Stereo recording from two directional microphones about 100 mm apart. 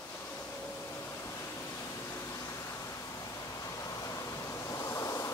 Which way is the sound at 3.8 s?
35° left (ahead or behind).